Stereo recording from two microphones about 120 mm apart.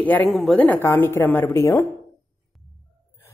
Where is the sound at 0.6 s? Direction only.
15° left (ahead or behind).